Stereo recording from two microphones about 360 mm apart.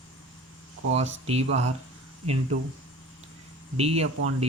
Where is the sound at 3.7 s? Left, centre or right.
Centre.